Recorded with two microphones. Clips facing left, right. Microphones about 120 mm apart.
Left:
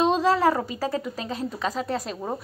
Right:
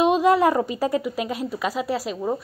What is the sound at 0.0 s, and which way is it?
A woman's voice, 15° right (ahead or behind).